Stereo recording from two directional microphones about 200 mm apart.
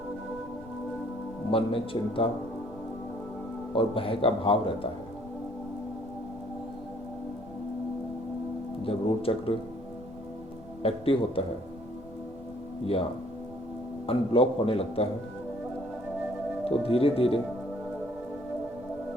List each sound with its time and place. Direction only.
1.5 s a man's voice: 25° left (ahead or behind)
3.8 s a man's voice: 25° left (ahead or behind)
8.9 s a man's voice: 30° left (ahead or behind)
10.8 s a man's voice: 30° left (ahead or behind)
14.1 s a man's voice: 30° left (ahead or behind)
16.6 s a man's voice: 30° left (ahead or behind)